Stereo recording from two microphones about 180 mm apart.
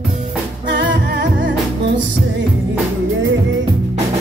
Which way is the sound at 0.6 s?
75° right (ahead or behind).